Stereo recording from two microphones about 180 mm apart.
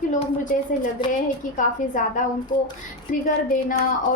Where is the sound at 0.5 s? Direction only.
50° left (ahead or behind).